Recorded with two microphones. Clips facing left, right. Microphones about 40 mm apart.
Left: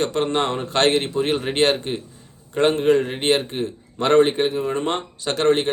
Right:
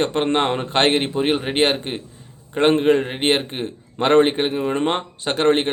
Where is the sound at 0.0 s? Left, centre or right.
Right.